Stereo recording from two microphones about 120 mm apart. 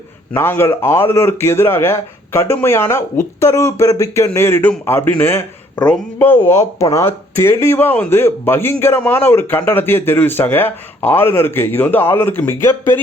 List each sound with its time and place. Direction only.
0.3 s a man's voice: 20° left (ahead or behind)